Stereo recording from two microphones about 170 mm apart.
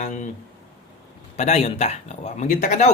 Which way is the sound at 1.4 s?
40° left (ahead or behind).